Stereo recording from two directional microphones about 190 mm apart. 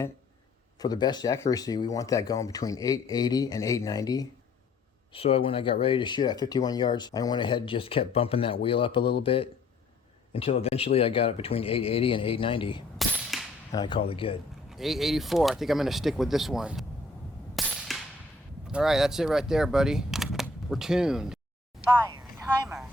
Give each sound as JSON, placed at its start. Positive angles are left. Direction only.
{"t": 0.8, "sound": "speech", "side_deg": 20}
{"t": 5.1, "sound": "speech", "side_deg": 30}
{"t": 13.0, "sound": "cap gun", "side_deg": 0}
{"t": 13.7, "sound": "speech", "side_deg": 25}
{"t": 14.7, "sound": "speech", "side_deg": 0}
{"t": 17.5, "sound": "cap gun", "side_deg": 0}
{"t": 18.7, "sound": "speech", "side_deg": 0}